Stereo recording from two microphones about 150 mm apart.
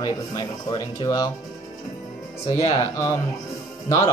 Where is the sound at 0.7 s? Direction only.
25° left (ahead or behind).